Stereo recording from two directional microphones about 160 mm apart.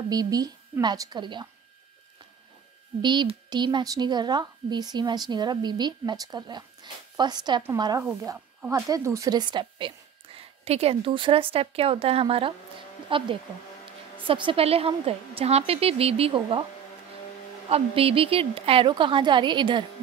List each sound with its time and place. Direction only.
0.1 s speech: 25° right (ahead or behind)
3.0 s a woman's voice: 30° right (ahead or behind)
17.6 s a woman's voice: 40° right (ahead or behind)